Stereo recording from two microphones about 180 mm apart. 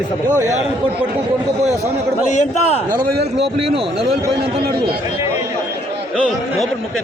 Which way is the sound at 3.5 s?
30° right (ahead or behind).